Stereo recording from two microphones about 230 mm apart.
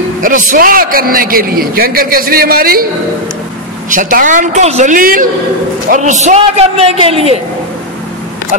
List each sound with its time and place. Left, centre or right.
0.2 s a man's voice: right
3.9 s a man's voice: right